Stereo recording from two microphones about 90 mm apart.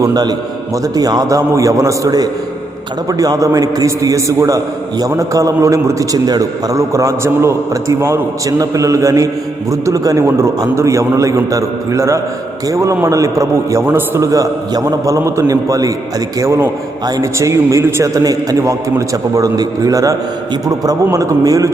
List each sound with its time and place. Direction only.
0.0 s a man's voice: 45° right (ahead or behind); by 14.2 s 25° right (ahead or behind)
14.2 s a man's voice: 40° right (ahead or behind)